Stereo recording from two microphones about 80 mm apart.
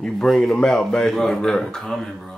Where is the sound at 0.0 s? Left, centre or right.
Centre.